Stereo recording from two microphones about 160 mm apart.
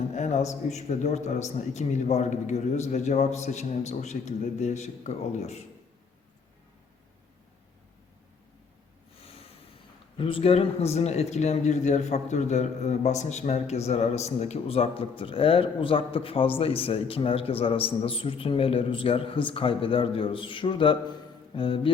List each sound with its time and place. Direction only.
0.1 s a sound: 45° left (ahead or behind)
0.7 s a man's voice: 45° left (ahead or behind)
10.2 s a man's voice: 35° left (ahead or behind)